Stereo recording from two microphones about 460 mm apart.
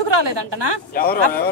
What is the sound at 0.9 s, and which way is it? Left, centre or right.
Speech, centre.